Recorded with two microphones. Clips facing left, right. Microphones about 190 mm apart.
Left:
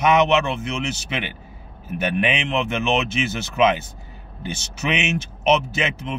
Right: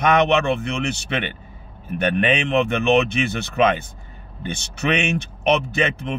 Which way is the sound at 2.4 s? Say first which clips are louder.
Right 4 dB; 55° right (ahead or behind).